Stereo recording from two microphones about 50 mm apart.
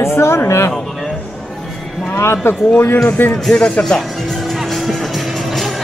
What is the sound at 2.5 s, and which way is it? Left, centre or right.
Speech, left.